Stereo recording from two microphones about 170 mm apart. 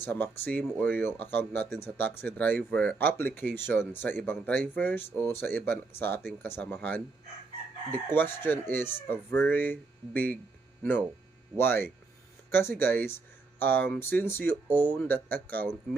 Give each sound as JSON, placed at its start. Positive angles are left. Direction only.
{"t": 0.0, "sound": "speech", "side_deg": 10}
{"t": 11.5, "sound": "speech", "side_deg": 15}